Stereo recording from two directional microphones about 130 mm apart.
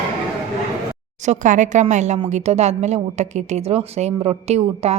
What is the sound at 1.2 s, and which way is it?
A woman's voice, 70° right (ahead or behind).